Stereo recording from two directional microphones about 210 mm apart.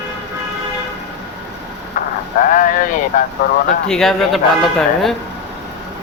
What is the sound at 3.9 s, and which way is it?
A man's voice, centre (ahead or behind).